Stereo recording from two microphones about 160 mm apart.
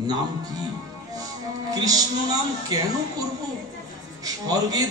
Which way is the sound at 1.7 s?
25° right (ahead or behind).